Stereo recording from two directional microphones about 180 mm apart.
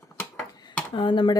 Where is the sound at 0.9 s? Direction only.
25° left (ahead or behind).